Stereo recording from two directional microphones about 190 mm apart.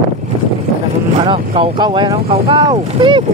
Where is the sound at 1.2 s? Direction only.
30° right (ahead or behind).